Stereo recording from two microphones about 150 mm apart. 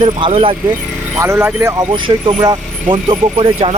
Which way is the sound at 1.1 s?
15° right (ahead or behind).